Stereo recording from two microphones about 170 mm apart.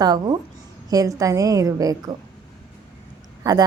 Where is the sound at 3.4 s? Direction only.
25° right (ahead or behind).